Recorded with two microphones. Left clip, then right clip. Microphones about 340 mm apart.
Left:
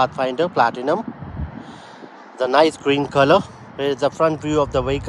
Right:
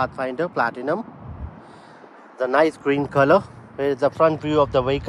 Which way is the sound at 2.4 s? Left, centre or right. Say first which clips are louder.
Left 3 dB; centre.